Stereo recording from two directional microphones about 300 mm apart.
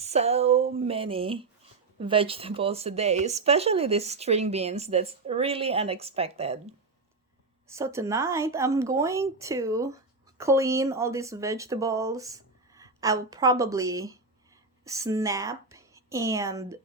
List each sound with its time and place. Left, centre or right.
0.0 s speech: right
7.7 s a woman's voice: centre